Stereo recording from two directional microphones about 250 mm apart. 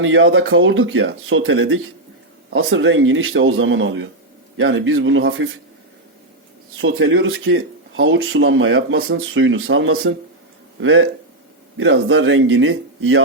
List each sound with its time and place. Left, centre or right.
0.0 s speech: right
6.8 s speech: right